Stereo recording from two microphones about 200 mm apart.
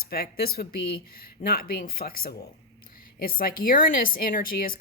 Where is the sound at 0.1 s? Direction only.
50° left (ahead or behind).